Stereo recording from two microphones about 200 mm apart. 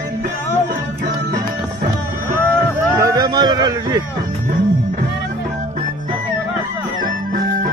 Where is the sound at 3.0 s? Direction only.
20° right (ahead or behind).